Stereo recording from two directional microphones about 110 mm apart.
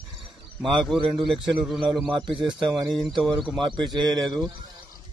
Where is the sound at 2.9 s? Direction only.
Centre (ahead or behind).